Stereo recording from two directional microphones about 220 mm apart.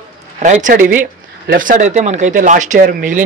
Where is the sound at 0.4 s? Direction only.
35° right (ahead or behind).